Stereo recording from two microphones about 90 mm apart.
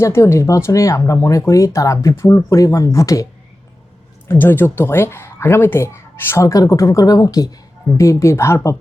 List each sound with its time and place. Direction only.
0.0 s speech: 30° left (ahead or behind)
4.3 s speech: 25° left (ahead or behind)